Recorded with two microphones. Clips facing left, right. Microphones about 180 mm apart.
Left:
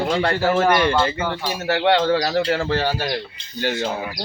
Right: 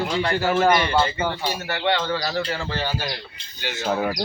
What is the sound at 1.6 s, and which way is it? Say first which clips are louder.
Speech: left 8 dB; 70° left (ahead or behind).